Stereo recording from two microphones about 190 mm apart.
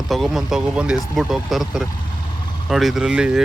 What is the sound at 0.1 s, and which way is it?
Speech, centre (ahead or behind).